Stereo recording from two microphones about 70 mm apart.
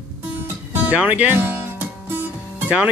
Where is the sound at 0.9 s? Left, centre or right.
Centre.